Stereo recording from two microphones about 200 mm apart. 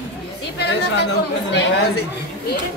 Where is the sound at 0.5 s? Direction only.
55° left (ahead or behind).